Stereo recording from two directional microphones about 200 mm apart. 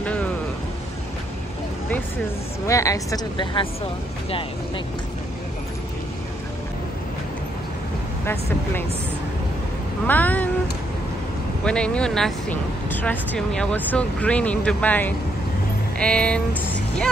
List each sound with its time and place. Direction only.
2.6 s a woman's voice: 15° left (ahead or behind)
10.0 s a woman's voice: 10° left (ahead or behind)
11.6 s speech: 5° left (ahead or behind)